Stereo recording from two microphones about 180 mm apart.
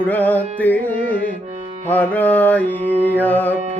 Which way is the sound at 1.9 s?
10° left (ahead or behind).